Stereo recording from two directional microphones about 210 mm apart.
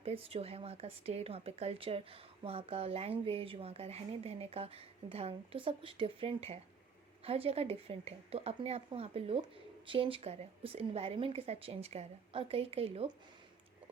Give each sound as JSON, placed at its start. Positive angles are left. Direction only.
{"t": 0.0, "sound": "speech", "side_deg": -25}